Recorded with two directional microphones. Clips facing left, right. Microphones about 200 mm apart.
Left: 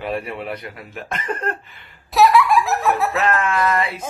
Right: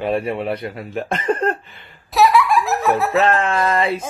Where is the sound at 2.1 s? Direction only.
Centre (ahead or behind).